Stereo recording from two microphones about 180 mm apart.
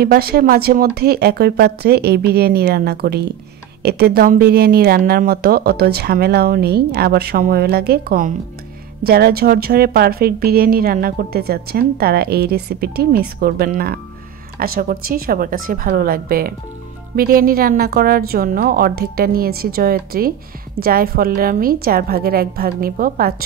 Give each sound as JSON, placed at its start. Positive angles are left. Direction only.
{"t": 0.0, "sound": "a woman's voice", "side_deg": -60}